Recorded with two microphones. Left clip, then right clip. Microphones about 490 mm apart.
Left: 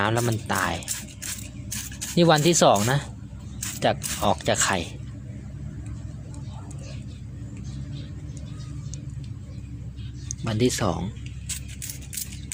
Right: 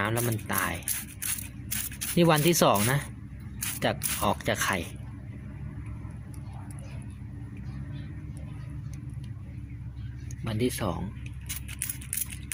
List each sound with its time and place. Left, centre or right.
0.0 s speech: right
2.1 s speech: right
10.4 s a sound: right
10.8 s speech: right